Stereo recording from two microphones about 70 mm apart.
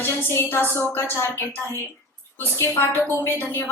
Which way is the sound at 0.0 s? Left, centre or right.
Left.